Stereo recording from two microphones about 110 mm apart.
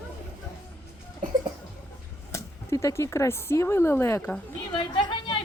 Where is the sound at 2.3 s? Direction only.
25° left (ahead or behind).